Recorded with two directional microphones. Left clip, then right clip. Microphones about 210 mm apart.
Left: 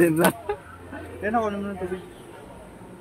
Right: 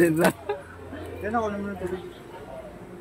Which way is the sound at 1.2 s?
40° left (ahead or behind).